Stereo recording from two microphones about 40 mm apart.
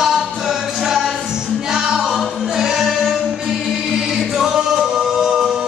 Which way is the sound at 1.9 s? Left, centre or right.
Centre.